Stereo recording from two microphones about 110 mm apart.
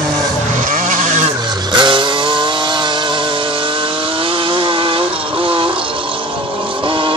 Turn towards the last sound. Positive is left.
turn(degrees=-50)  # may be behind; listen again after turning